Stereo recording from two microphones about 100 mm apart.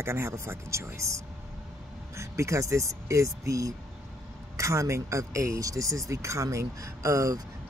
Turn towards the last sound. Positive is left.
turn(degrees=-30)  # may be behind; listen again after turning